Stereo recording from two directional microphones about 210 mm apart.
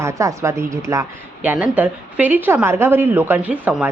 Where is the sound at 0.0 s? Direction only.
15° right (ahead or behind).